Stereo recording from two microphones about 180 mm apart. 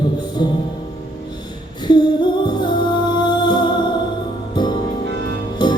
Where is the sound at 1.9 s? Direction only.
25° left (ahead or behind).